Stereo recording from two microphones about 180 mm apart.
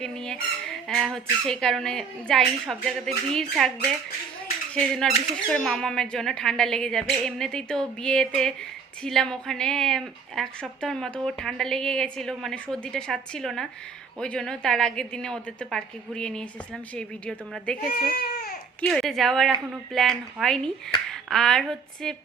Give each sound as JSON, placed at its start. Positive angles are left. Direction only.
{"t": 0.0, "sound": "squawk", "side_deg": 5}
{"t": 4.7, "sound": "squawk", "side_deg": 5}
{"t": 18.1, "sound": "baby cry", "side_deg": 60}
{"t": 18.8, "sound": "squawk", "side_deg": 5}
{"t": 21.1, "sound": "speech", "side_deg": 5}